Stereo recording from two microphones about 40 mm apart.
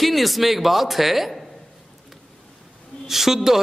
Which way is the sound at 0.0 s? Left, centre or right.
Centre.